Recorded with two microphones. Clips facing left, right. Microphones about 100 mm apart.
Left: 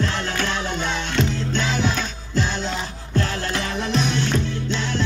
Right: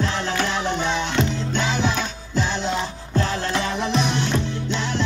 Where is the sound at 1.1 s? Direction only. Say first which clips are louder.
Even; 15° right (ahead or behind).